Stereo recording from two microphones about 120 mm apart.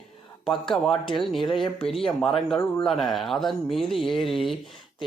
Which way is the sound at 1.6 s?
55° left (ahead or behind).